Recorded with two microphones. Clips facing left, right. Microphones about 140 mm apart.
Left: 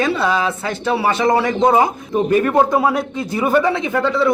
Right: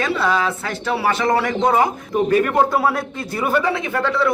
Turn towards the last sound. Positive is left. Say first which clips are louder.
# left 3 dB
turn(degrees=20)  # may be behind; listen again after turning